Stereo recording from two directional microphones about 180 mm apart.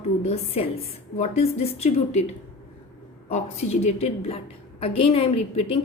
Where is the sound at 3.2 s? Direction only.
40° left (ahead or behind).